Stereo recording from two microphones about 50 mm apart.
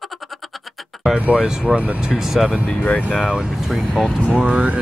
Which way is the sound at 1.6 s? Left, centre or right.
Right.